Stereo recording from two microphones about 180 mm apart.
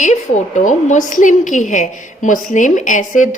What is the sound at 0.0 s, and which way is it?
A woman's voice, 40° left (ahead or behind).